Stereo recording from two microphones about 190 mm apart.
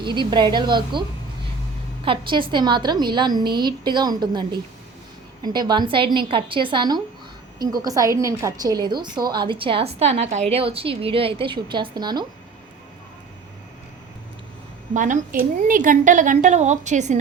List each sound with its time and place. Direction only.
0.0 s a woman's voice: 25° right (ahead or behind)
2.0 s a woman's voice: 25° right (ahead or behind)
14.9 s a woman's voice: 40° right (ahead or behind)